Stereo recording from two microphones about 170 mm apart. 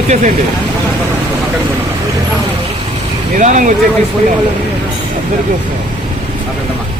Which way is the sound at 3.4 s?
50° right (ahead or behind).